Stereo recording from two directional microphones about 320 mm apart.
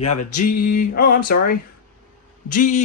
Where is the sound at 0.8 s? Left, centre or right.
Left.